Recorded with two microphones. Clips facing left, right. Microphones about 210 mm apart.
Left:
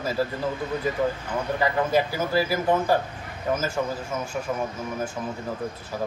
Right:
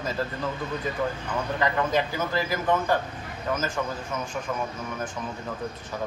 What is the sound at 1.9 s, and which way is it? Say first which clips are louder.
A man's voice: left 3 dB; 10° left (ahead or behind).